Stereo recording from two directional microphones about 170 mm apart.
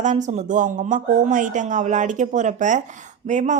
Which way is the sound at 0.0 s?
45° right (ahead or behind).